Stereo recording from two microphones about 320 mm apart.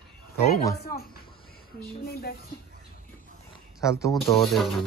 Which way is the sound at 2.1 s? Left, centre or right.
Left.